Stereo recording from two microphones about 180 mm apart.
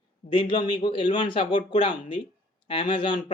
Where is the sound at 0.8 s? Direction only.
25° left (ahead or behind).